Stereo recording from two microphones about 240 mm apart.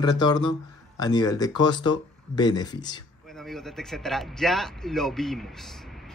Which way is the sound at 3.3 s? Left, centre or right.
Centre.